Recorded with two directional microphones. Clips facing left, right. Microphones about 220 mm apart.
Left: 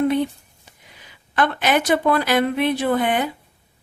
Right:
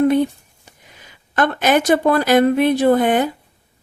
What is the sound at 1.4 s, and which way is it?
Speech, 45° right (ahead or behind).